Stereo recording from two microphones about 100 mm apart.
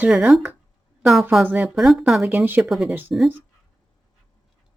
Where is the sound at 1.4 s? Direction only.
15° right (ahead or behind).